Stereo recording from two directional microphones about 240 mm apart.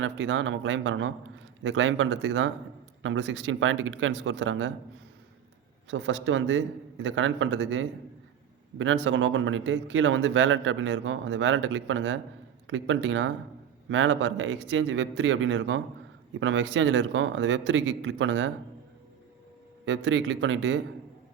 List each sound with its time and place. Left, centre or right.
0.0 s speech: right
5.9 s speech: right
9.0 s speech: right
19.8 s speech: right